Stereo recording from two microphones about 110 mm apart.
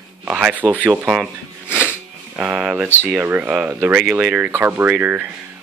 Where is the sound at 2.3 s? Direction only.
15° right (ahead or behind).